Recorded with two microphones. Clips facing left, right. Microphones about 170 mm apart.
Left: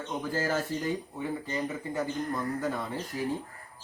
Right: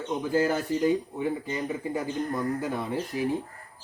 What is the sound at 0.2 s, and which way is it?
Speech, 15° right (ahead or behind).